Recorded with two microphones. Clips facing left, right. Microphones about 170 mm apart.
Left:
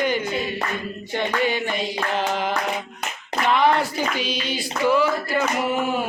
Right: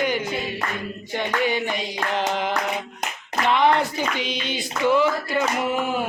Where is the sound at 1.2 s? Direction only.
15° right (ahead or behind).